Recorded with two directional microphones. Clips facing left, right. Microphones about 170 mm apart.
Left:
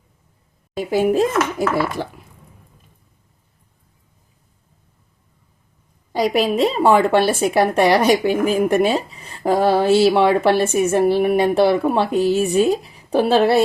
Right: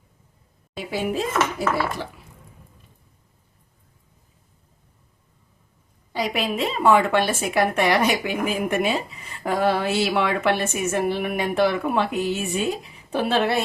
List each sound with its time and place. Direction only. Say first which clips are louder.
0.8 s speech: left 9 dB; 45° left (ahead or behind)
6.1 s a woman's voice: left 7 dB; 35° left (ahead or behind)